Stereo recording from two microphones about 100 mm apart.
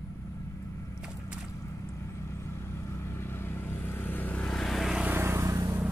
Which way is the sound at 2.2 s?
25° left (ahead or behind).